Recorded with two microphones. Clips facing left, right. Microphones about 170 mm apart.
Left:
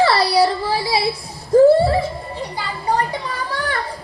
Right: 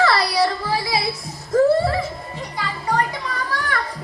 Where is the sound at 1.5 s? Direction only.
30° left (ahead or behind).